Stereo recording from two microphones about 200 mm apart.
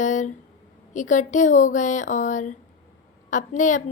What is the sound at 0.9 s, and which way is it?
Speech, 40° left (ahead or behind).